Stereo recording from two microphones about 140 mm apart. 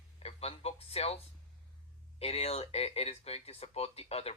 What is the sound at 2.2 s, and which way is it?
Speech, 45° left (ahead or behind).